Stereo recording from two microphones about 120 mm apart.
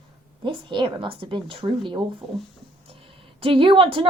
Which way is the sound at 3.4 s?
50° right (ahead or behind).